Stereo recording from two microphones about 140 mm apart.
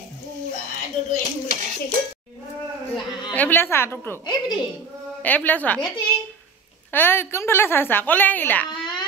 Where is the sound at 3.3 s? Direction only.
15° left (ahead or behind).